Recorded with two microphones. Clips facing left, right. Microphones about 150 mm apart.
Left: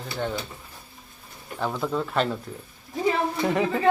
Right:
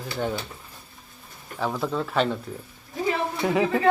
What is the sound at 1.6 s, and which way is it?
Speech, centre (ahead or behind).